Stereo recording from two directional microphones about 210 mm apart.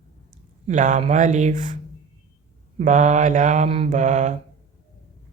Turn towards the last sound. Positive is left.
turn(degrees=-35)  # may be behind; listen again after turning